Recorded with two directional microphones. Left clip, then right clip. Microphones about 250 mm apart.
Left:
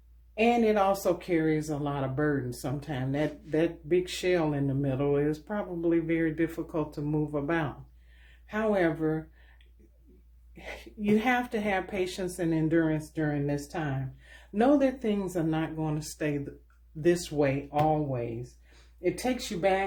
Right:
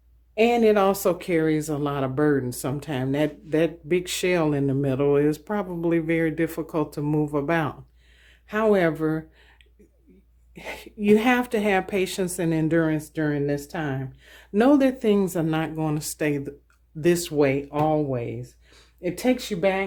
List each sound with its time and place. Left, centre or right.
0.3 s speech: right
10.5 s speech: right